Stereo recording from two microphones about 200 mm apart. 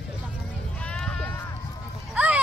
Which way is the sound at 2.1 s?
5° right (ahead or behind).